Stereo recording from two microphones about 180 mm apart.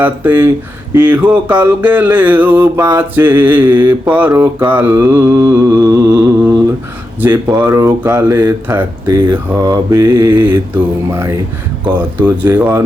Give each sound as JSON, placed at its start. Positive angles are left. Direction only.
{"t": 0.0, "sound": "mantra", "side_deg": -10}
{"t": 12.5, "sound": "mantra", "side_deg": -10}